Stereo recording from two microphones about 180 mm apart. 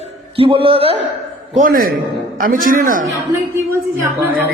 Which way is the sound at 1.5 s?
50° right (ahead or behind).